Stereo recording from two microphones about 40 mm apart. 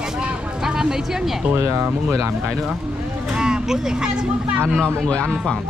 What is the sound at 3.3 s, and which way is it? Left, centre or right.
Speech, centre.